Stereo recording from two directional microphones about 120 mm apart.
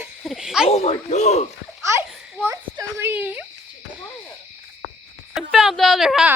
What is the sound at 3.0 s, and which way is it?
Speech, 15° right (ahead or behind).